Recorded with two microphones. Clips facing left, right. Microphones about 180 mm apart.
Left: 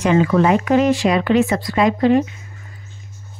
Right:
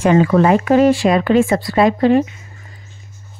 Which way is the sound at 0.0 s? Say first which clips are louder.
Right 3 dB; 45° right (ahead or behind).